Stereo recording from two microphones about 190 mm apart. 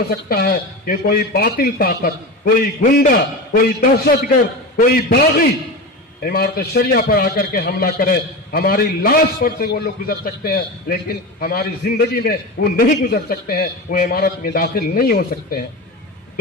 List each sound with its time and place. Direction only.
0.3 s a man's voice: 50° left (ahead or behind)